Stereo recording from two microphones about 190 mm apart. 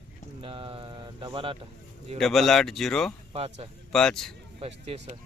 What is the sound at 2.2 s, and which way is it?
Speech, centre (ahead or behind).